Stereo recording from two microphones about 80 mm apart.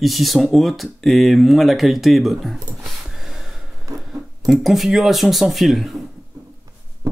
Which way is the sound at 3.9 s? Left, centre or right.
Right.